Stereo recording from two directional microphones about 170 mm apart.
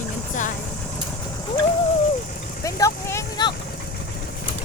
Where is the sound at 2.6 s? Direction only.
20° left (ahead or behind).